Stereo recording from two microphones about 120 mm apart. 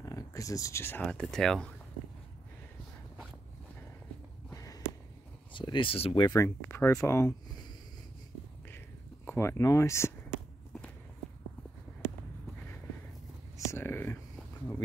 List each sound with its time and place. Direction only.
0.0 s speech: 30° left (ahead or behind)
1.0 s speech: 5° left (ahead or behind)
4.6 s a sound: 30° left (ahead or behind)
5.5 s speech: 45° left (ahead or behind)
6.3 s speech: 25° left (ahead or behind)
8.7 s a sound: 20° left (ahead or behind)
13.7 s whispering: 20° left (ahead or behind)